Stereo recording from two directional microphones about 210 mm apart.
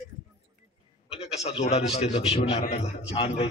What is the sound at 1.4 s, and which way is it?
A man's voice, 30° left (ahead or behind).